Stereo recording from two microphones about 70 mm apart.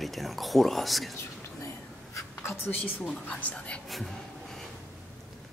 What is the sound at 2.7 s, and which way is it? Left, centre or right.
A woman's voice, centre.